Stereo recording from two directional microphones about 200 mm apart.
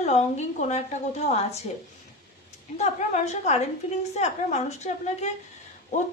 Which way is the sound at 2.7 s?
35° left (ahead or behind).